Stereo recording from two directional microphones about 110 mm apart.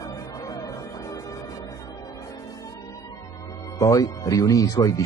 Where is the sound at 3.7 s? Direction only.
30° left (ahead or behind).